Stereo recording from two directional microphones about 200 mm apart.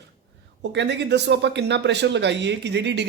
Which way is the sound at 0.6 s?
60° right (ahead or behind).